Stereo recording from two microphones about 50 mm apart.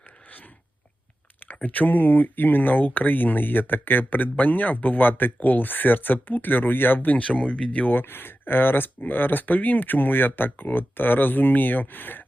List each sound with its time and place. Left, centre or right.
0.3 s a sound: left
1.6 s speech: left
7.2 s speech: left
7.9 s speech: left